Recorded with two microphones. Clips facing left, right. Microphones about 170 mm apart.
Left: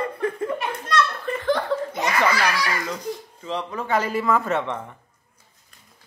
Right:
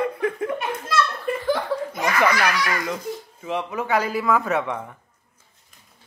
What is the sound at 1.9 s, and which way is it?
Belly laugh, 25° left (ahead or behind).